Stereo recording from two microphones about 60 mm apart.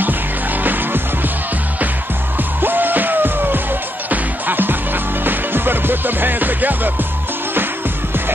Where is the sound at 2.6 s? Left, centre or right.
Right.